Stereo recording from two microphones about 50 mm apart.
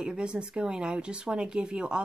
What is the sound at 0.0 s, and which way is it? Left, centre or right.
Speech, centre.